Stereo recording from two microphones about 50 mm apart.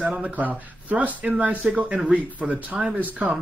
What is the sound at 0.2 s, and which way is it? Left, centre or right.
Speech, right.